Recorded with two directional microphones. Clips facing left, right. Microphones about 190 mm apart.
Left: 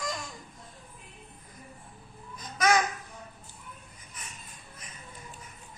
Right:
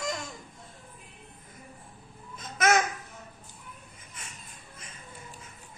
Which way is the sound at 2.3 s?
25° right (ahead or behind).